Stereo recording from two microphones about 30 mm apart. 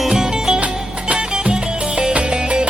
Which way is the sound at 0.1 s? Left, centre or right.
Centre.